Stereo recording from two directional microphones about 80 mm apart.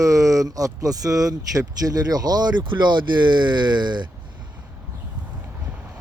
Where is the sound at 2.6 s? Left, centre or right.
Right.